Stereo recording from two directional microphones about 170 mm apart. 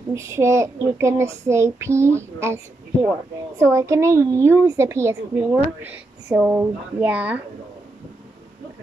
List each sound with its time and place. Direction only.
0.1 s child singing: 15° right (ahead or behind)